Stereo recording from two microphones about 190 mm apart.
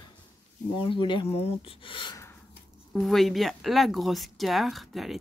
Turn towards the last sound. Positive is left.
turn(degrees=0)  # may be behind; listen again after turning